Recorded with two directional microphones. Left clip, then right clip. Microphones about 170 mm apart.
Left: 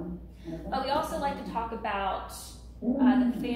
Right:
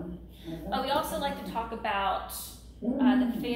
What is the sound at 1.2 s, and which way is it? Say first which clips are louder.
Speech: left 1 dB; centre (ahead or behind).